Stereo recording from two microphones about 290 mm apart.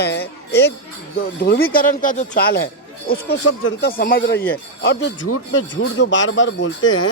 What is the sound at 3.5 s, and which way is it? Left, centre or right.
Speech, left.